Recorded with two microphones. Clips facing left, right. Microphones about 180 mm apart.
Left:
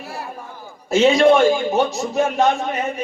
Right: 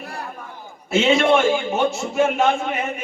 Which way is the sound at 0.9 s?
40° left (ahead or behind).